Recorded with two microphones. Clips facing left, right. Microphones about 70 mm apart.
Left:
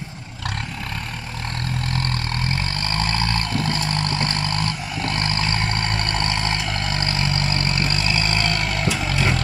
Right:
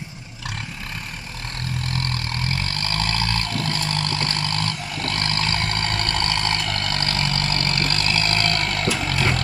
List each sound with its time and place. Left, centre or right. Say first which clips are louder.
2.7 s vehicle: left 1 dB; left; by 9.4 s centre